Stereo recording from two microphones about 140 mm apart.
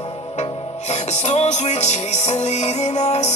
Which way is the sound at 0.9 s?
55° left (ahead or behind).